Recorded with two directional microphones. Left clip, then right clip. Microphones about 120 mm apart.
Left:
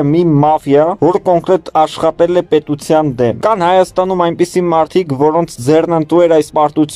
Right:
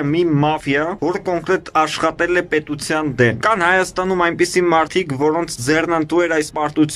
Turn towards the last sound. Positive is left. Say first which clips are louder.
# left 7 dB
turn(degrees=30)  # may be behind; listen again after turning